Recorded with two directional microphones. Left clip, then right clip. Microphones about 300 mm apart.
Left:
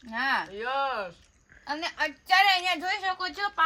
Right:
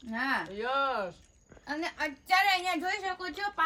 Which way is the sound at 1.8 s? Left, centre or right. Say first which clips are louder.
Left 4 dB; centre.